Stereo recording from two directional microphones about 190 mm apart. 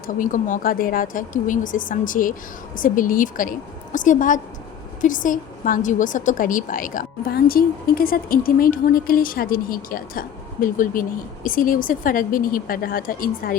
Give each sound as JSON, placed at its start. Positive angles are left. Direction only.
{"t": 0.1, "sound": "a woman's voice", "side_deg": 45}